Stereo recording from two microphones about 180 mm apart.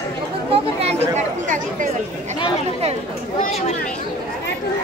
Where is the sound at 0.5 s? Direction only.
35° right (ahead or behind).